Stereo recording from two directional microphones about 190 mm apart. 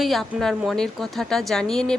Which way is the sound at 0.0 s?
Centre (ahead or behind).